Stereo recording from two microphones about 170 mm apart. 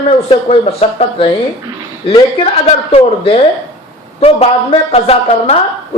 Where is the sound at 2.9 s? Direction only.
35° left (ahead or behind).